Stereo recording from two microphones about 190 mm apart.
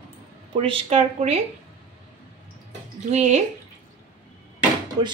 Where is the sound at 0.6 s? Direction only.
35° right (ahead or behind).